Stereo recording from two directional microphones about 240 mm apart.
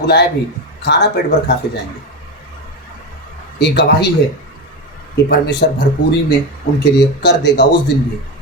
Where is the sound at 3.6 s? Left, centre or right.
Left.